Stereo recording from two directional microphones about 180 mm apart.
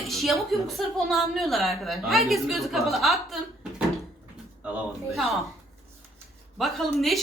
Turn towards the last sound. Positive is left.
turn(degrees=0)  # may be behind; listen again after turning